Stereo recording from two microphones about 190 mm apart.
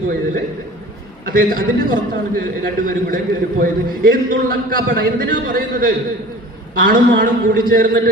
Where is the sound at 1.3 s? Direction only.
50° right (ahead or behind).